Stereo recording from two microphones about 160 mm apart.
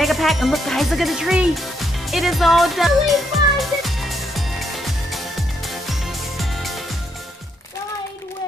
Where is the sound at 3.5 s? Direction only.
Centre (ahead or behind).